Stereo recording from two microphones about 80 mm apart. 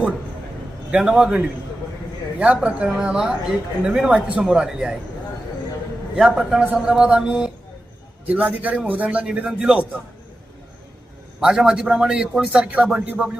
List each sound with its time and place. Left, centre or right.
0.9 s a man's voice: centre
2.6 s a man's voice: centre
6.1 s a man's voice: centre
11.3 s a man's voice: centre